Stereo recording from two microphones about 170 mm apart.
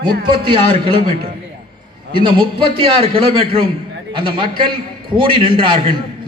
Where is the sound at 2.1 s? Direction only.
30° right (ahead or behind).